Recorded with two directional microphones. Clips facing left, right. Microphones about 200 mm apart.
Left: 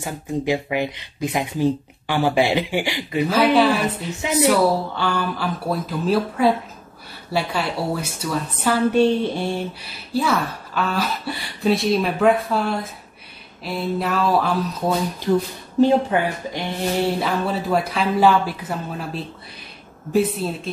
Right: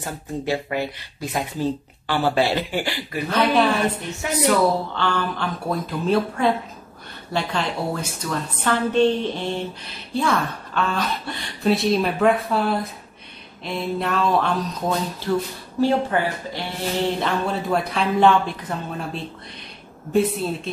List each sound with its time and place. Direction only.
0.0 s speech: 15° left (ahead or behind)
3.3 s a woman's voice: 5° left (ahead or behind)
15.3 s speech: 15° left (ahead or behind)
17.2 s a woman's voice: 5° left (ahead or behind)